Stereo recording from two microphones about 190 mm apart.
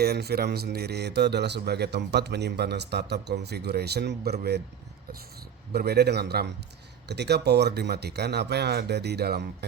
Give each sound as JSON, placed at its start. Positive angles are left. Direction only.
{"t": 0.0, "sound": "speech", "side_deg": -55}
{"t": 5.7, "sound": "speech", "side_deg": -55}